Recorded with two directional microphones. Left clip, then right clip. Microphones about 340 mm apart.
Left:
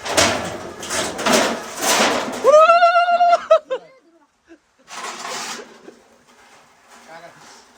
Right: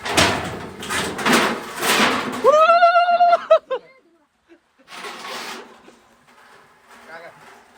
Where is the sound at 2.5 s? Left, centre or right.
Centre.